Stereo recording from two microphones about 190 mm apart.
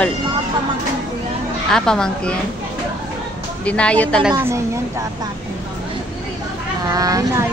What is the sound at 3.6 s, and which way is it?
Speech, 5° left (ahead or behind).